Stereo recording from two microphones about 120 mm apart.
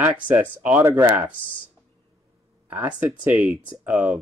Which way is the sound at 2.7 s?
15° right (ahead or behind).